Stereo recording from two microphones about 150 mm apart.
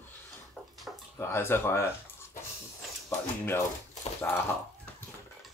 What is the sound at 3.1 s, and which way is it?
Speech, 15° left (ahead or behind).